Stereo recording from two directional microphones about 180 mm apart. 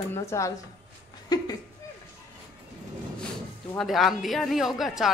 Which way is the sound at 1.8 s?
20° left (ahead or behind).